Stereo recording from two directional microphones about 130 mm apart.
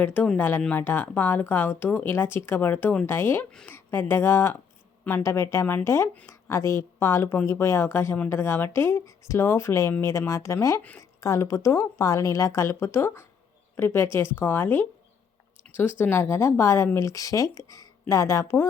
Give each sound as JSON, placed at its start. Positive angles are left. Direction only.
{"t": 0.0, "sound": "speech", "side_deg": 10}
{"t": 3.5, "sound": "speech", "side_deg": 5}
{"t": 3.8, "sound": "speech", "side_deg": 20}